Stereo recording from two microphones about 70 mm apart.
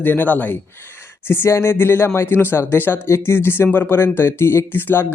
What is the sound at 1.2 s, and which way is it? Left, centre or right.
Speech, left.